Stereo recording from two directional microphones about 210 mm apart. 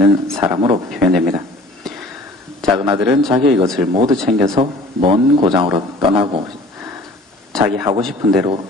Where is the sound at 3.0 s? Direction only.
5° right (ahead or behind).